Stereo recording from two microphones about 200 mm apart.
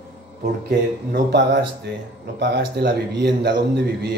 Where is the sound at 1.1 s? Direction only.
55° right (ahead or behind).